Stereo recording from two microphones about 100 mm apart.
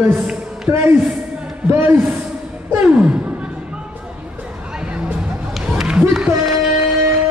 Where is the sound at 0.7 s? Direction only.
25° right (ahead or behind).